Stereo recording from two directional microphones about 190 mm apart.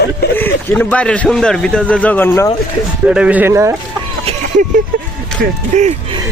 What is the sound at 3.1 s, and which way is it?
Speech, 5° right (ahead or behind).